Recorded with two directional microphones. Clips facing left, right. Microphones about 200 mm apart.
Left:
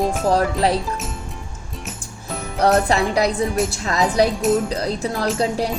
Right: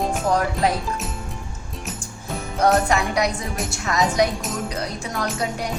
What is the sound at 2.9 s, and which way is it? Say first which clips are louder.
Music: left 3 dB; 30° left (ahead or behind).